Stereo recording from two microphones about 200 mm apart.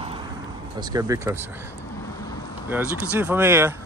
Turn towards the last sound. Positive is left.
turn(degrees=-10)  # may be behind; listen again after turning